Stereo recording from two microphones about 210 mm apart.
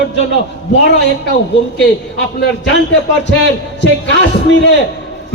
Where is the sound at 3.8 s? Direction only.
60° left (ahead or behind).